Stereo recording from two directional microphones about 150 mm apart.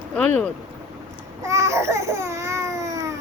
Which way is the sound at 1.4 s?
20° right (ahead or behind).